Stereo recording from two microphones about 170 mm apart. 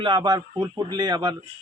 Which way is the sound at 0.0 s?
25° right (ahead or behind).